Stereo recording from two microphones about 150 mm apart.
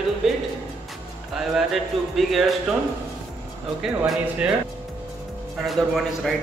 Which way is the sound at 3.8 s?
5° right (ahead or behind).